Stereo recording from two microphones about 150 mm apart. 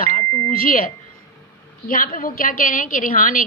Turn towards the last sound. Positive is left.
turn(degrees=65)  # may be behind; listen again after turning